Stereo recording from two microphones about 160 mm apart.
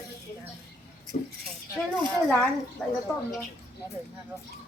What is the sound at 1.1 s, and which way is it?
Speech, 50° left (ahead or behind).